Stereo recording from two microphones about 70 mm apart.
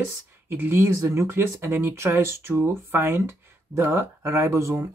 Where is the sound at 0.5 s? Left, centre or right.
Right.